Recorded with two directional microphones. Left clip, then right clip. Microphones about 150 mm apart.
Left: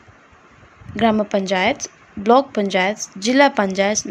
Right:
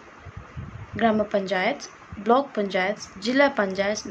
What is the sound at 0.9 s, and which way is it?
A woman's voice, 50° left (ahead or behind).